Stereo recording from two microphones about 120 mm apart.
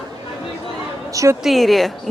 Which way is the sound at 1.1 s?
25° right (ahead or behind).